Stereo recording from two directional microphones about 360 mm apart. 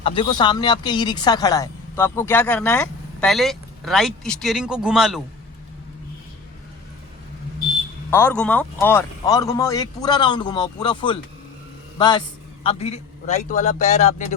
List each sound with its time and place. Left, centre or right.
0.0 s speech: centre
8.1 s a man's voice: centre